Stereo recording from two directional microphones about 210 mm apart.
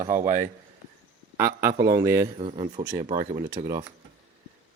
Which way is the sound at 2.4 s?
30° right (ahead or behind).